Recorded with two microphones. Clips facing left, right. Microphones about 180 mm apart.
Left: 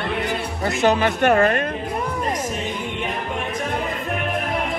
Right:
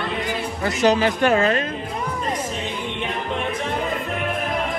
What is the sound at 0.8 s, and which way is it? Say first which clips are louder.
Speech: even; 55° left (ahead or behind).